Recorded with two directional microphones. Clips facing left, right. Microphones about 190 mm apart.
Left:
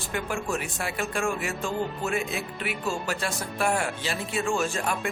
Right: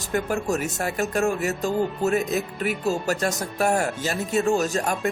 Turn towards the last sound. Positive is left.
turn(degrees=-40)  # may be behind; listen again after turning